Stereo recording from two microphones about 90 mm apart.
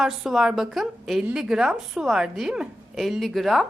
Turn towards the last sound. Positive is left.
turn(degrees=0)  # may be behind; listen again after turning